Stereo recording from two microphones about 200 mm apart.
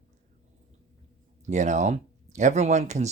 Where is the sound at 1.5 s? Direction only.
35° right (ahead or behind).